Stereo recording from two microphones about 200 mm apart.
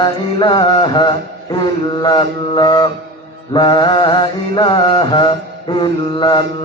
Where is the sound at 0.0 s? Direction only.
20° left (ahead or behind).